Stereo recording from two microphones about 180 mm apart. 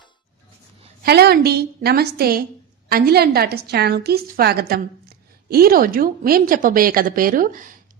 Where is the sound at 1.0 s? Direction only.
60° right (ahead or behind).